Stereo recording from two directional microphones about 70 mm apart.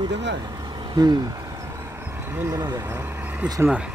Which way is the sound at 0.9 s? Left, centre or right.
Right.